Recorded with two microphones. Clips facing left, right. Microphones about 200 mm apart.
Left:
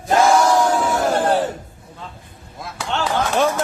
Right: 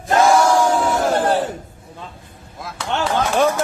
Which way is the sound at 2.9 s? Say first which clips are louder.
Right 1 dB; 20° right (ahead or behind).